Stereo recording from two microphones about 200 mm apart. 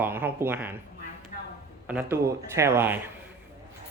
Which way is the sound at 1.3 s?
40° left (ahead or behind).